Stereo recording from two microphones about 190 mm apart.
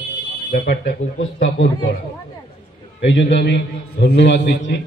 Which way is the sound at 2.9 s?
60° left (ahead or behind).